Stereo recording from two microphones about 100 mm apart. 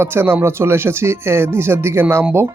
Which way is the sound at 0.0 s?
20° right (ahead or behind).